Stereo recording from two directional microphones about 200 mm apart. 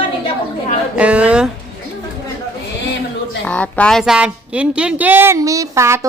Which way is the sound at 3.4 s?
5° left (ahead or behind).